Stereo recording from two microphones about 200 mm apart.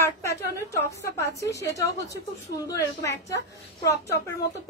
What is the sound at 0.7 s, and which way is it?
A woman's voice, 15° left (ahead or behind).